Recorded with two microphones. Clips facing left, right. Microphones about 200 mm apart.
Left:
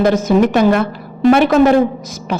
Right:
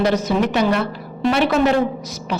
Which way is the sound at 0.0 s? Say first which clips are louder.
Left 6 dB; 50° left (ahead or behind).